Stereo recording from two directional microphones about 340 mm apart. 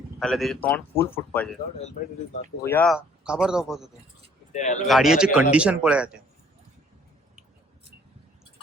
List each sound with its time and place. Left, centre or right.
0.2 s speech: centre
2.6 s speech: centre
4.5 s speech: left
4.9 s speech: centre